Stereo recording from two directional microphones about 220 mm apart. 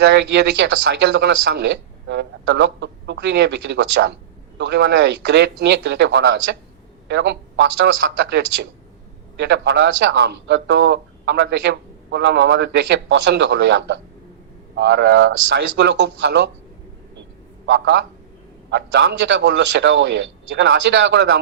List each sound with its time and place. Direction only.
0.0 s speech: 50° right (ahead or behind)
9.4 s speech: 50° right (ahead or behind)
17.7 s speech: 50° right (ahead or behind)